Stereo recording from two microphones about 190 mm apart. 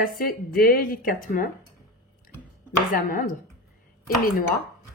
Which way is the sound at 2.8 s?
45° left (ahead or behind).